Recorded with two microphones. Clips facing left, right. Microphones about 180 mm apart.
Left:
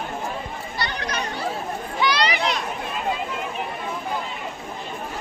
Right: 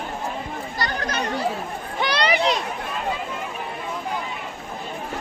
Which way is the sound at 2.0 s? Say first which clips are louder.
Right 1 dB; 55° right (ahead or behind).